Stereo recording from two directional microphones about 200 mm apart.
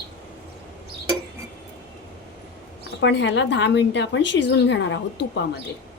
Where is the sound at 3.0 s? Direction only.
60° left (ahead or behind).